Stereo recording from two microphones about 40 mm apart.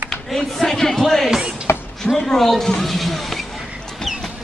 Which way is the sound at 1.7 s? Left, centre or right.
Left.